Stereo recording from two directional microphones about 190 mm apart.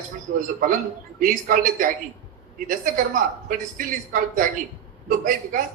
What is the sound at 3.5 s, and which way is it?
A man's voice, 45° right (ahead or behind).